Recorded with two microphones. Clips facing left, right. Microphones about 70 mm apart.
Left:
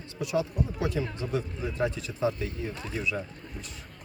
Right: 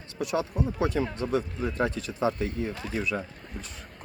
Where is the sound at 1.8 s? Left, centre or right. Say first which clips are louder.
Right 1 dB; right.